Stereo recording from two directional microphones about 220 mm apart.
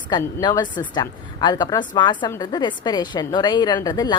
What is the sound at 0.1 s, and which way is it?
A woman's voice, 15° left (ahead or behind).